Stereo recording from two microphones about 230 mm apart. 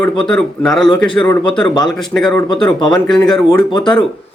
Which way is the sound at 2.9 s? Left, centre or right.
Centre.